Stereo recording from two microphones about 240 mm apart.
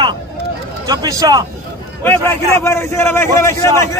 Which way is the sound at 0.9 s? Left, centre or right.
Centre.